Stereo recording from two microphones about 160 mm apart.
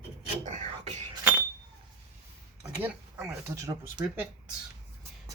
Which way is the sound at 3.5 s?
20° right (ahead or behind).